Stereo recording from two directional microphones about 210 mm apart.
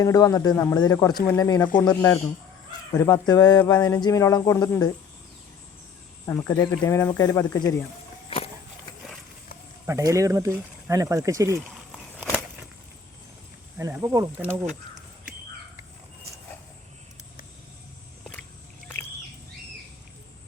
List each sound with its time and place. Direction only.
0.0 s speech: 15° left (ahead or behind)
6.2 s speech: 15° left (ahead or behind)
9.8 s speech: 15° right (ahead or behind)
13.7 s speech: 15° right (ahead or behind)